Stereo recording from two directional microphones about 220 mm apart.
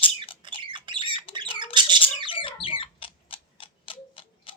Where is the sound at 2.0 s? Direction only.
25° left (ahead or behind).